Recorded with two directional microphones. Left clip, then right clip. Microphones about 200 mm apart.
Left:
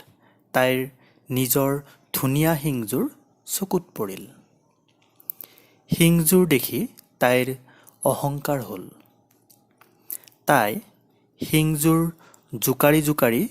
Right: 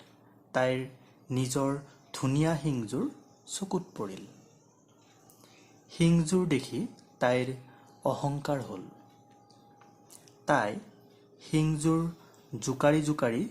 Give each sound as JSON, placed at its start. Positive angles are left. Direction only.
{"t": 0.5, "sound": "speech", "side_deg": 40}
{"t": 5.9, "sound": "speech", "side_deg": 40}
{"t": 10.2, "sound": "a sound", "side_deg": 40}
{"t": 11.3, "sound": "music", "side_deg": 40}
{"t": 12.5, "sound": "speech", "side_deg": 40}